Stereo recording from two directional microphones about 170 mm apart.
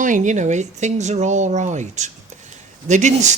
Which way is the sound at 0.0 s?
45° right (ahead or behind).